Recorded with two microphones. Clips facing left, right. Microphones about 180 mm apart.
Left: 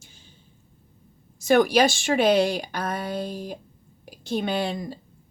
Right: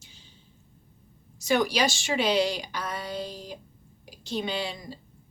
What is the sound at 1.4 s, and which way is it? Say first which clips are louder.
A woman's voice: left 6 dB; 50° left (ahead or behind).